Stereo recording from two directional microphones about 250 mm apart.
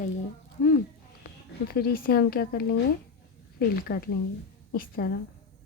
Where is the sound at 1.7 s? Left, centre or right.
Left.